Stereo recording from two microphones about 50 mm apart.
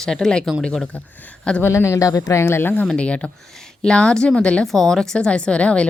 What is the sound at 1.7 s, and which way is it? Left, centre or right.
Speech, left.